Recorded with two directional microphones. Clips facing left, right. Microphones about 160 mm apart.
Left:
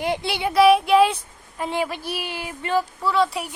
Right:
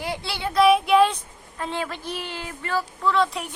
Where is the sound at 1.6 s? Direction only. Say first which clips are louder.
Left 4 dB; 15° left (ahead or behind).